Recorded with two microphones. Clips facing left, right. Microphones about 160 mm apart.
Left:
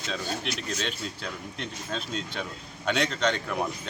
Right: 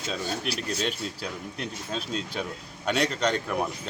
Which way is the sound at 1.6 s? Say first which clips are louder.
Right 1 dB; 5° right (ahead or behind).